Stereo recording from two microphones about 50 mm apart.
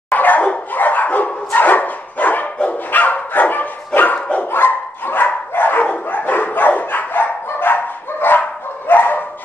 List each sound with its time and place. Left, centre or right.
0.1 s dog: left